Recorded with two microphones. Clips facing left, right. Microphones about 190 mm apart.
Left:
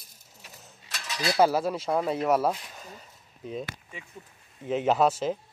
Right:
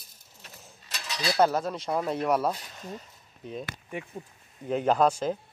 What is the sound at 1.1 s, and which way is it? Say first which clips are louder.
Speech: left 1 dB; 5° left (ahead or behind).